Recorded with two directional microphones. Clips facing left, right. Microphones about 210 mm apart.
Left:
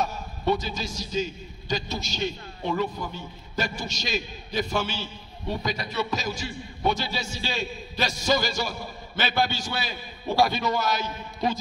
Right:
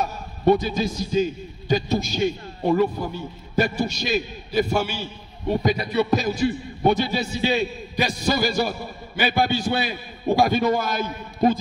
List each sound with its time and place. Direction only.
0.0 s a man's voice: 55° right (ahead or behind)
4.1 s a man's voice: 5° right (ahead or behind)
5.5 s a man's voice: 50° right (ahead or behind)
7.5 s a man's voice: 15° right (ahead or behind)
8.1 s a man's voice: 55° right (ahead or behind)
9.1 s a man's voice: 15° right (ahead or behind)
9.5 s a man's voice: 55° right (ahead or behind)